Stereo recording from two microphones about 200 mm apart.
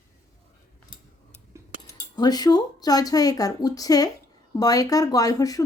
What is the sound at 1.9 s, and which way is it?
Speech, 20° left (ahead or behind).